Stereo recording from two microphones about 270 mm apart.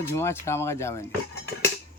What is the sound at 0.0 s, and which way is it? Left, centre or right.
Speech, centre.